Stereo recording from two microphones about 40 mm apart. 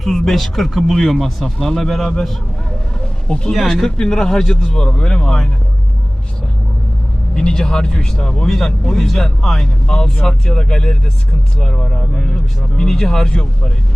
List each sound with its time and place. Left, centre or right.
0.0 s speech: centre
3.2 s speech: left
3.5 s speech: centre
3.9 s a man's voice: left
7.3 s speech: centre